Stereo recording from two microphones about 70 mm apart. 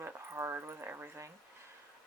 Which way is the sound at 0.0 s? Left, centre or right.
Right.